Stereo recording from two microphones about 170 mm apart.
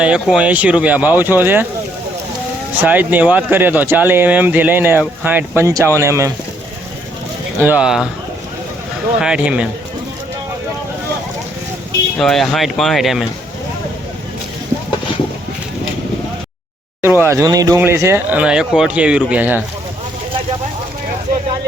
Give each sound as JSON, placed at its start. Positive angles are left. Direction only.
{"t": 0.0, "sound": "speech", "side_deg": -5}
{"t": 2.8, "sound": "speech", "side_deg": -10}
{"t": 7.6, "sound": "speech", "side_deg": -10}
{"t": 9.2, "sound": "speech", "side_deg": -5}
{"t": 12.2, "sound": "speech", "side_deg": 0}
{"t": 17.0, "sound": "speech", "side_deg": -15}